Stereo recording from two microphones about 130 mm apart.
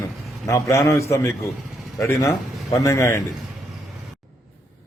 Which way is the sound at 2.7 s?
25° left (ahead or behind).